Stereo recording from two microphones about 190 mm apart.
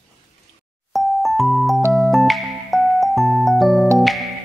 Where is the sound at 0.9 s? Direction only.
Centre (ahead or behind).